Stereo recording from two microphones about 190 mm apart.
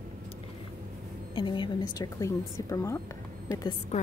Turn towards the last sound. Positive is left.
turn(degrees=20)  # may be behind; listen again after turning